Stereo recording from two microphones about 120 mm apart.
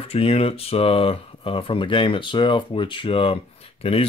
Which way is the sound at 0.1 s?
55° left (ahead or behind).